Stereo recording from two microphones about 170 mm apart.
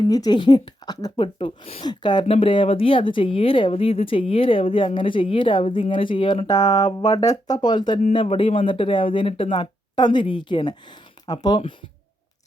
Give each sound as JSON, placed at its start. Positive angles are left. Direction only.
{"t": 0.1, "sound": "speech", "side_deg": 25}